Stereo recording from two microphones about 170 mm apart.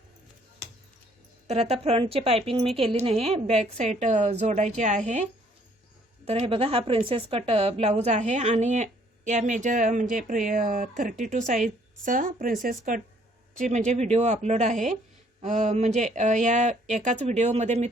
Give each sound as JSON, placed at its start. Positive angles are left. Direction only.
{"t": 1.5, "sound": "a woman's voice", "side_deg": -40}